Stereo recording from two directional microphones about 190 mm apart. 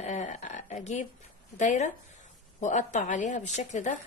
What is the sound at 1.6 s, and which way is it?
A woman's voice, 40° left (ahead or behind).